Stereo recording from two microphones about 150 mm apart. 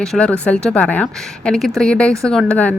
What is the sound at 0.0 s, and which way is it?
A woman's voice, 5° left (ahead or behind).